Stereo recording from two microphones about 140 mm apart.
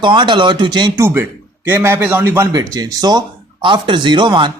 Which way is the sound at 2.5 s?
25° right (ahead or behind).